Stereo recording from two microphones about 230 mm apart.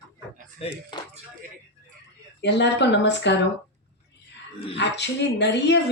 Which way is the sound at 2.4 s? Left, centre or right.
Left.